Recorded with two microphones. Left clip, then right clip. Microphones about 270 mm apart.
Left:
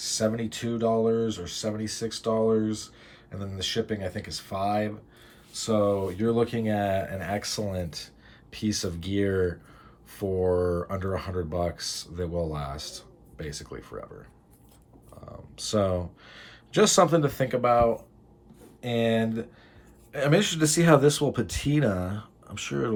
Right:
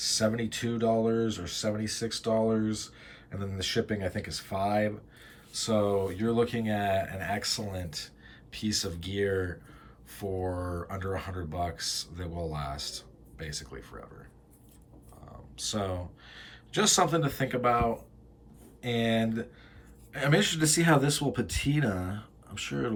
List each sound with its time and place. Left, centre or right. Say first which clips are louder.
0.0 s speech: left 1 dB; centre
15.5 s speech: left 7 dB; centre